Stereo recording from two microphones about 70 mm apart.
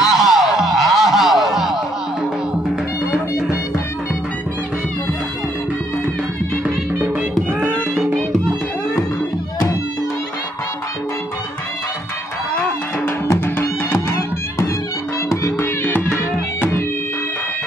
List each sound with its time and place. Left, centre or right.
0.0 s music: centre
13.0 s music: left
15.2 s music: left